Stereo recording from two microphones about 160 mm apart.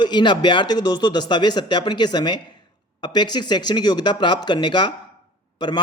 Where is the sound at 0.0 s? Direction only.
30° left (ahead or behind).